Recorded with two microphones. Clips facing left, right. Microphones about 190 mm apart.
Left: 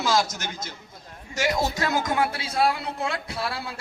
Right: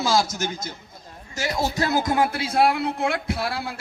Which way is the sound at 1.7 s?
35° right (ahead or behind).